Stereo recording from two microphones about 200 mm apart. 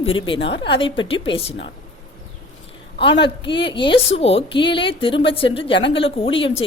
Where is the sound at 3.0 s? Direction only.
25° left (ahead or behind).